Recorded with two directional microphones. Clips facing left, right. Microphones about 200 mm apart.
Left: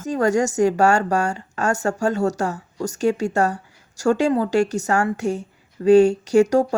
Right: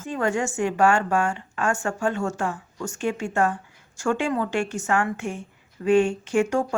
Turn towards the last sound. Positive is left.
turn(degrees=40)  # may be behind; listen again after turning